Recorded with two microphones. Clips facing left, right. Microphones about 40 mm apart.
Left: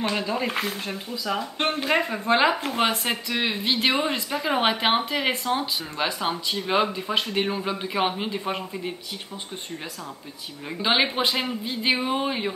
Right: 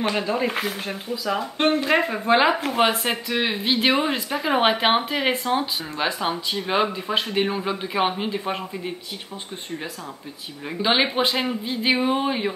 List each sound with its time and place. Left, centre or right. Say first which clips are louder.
0.1 s speech: right 2 dB; centre
10.8 s speech: right 2 dB; centre